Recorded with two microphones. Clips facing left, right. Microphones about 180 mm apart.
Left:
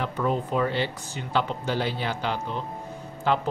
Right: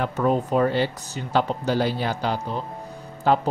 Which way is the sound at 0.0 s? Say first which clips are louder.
Right 4 dB; 45° right (ahead or behind).